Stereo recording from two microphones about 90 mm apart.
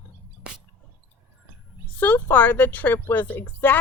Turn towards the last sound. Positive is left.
turn(degrees=20)  # may be behind; listen again after turning